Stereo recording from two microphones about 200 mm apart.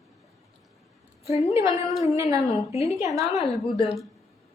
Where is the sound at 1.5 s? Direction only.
15° right (ahead or behind).